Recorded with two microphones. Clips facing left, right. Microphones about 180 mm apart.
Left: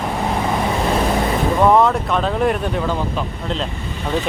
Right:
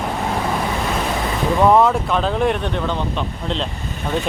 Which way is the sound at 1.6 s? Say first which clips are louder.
Right 1 dB; centre (ahead or behind).